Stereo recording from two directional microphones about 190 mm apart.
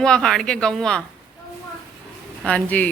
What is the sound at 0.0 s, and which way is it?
A woman's voice, 5° left (ahead or behind).